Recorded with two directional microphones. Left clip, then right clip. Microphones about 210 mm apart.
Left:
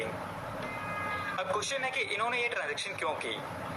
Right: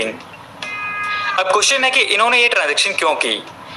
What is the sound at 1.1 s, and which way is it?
A man's voice, 35° right (ahead or behind).